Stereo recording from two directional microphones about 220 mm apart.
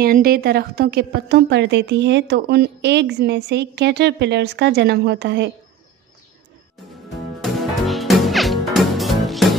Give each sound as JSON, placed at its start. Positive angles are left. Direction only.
{"t": 0.0, "sound": "a woman's voice", "side_deg": -45}
{"t": 7.5, "sound": "music", "side_deg": 0}